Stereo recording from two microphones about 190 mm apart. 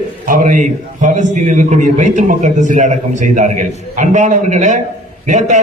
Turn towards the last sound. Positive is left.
turn(degrees=-40)  # may be behind; listen again after turning